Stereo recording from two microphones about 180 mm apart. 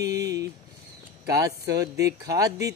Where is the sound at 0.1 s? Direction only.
20° right (ahead or behind).